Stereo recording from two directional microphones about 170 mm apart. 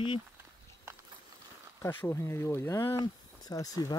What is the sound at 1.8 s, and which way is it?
Speech, 15° left (ahead or behind).